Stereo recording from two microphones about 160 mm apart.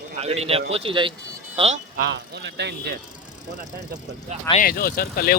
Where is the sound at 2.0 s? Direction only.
90° right.